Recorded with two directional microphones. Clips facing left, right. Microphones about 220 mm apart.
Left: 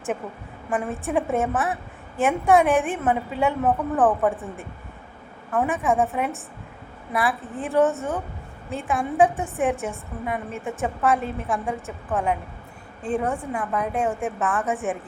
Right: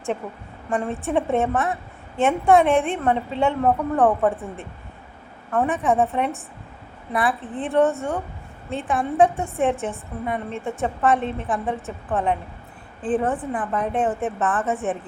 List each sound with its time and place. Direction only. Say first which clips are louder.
0.7 s a woman's voice: right 2 dB; centre (ahead or behind)
4.3 s speech: right 1 dB; 15° left (ahead or behind)
5.5 s a woman's voice: right 2 dB; centre (ahead or behind)